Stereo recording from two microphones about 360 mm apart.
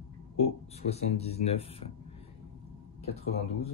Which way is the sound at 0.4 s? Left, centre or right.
Centre.